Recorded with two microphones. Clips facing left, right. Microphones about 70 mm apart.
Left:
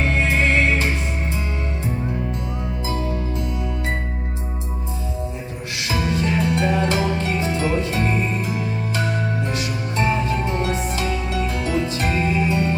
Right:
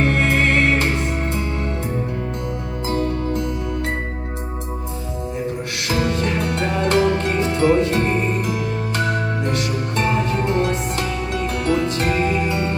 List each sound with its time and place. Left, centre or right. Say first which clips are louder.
0.0 s music: right 2 dB; right
2.8 s music: right 5 dB; right
5.9 s music: right 1 dB; right